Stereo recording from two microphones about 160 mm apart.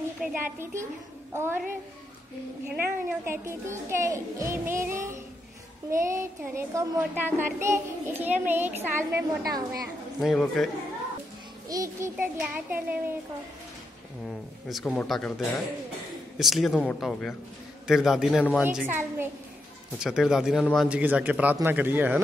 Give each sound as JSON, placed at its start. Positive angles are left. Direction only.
{"t": 0.2, "sound": "a child's voice", "side_deg": -10}
{"t": 2.8, "sound": "a child's voice", "side_deg": -15}
{"t": 10.2, "sound": "a man's voice", "side_deg": 0}
{"t": 11.7, "sound": "a child's voice", "side_deg": -20}
{"t": 14.7, "sound": "a man's voice", "side_deg": 5}
{"t": 21.0, "sound": "a child's voice", "side_deg": -10}